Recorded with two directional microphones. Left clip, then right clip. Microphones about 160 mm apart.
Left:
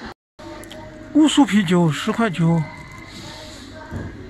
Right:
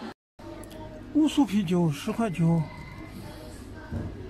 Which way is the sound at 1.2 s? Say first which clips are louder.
Left 10 dB; 5° left (ahead or behind).